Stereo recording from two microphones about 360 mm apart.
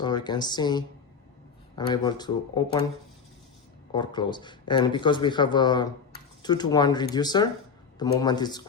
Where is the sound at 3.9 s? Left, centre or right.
Centre.